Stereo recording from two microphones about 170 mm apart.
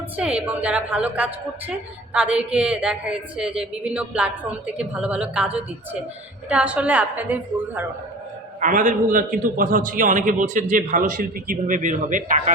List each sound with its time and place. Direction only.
0.2 s a woman's voice: 5° right (ahead or behind)
8.6 s a man's voice: 50° right (ahead or behind)